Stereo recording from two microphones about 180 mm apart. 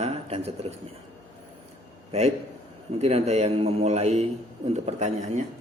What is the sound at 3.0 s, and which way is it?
Speech, 35° right (ahead or behind).